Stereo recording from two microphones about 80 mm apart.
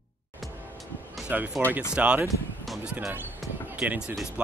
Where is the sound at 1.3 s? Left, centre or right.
Right.